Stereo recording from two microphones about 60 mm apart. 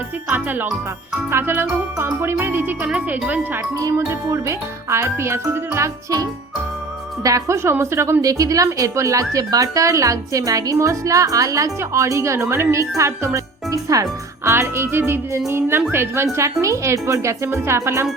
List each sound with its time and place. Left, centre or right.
0.3 s music: right
4.4 s speech: right
7.2 s speech: right
8.2 s speech: right
9.3 s speech: right
14.5 s music: right
15.9 s speech: right